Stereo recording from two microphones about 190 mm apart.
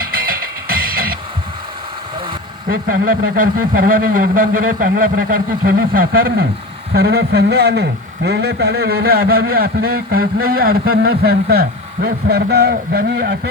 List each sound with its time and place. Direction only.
0.0 s music: 50° right (ahead or behind)
2.6 s a man's voice: 50° right (ahead or behind)